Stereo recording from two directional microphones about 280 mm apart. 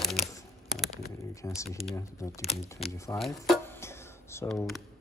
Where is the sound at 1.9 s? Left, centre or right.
Centre.